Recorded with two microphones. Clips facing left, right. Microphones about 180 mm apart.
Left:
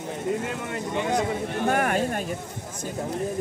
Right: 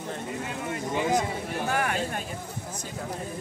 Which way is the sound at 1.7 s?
50° left (ahead or behind).